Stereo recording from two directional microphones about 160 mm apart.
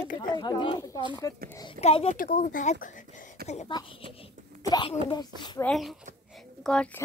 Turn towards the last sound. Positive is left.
turn(degrees=5)  # may be behind; listen again after turning